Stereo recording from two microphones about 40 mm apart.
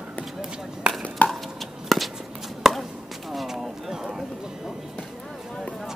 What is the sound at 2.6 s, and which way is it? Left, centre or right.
Chop, centre.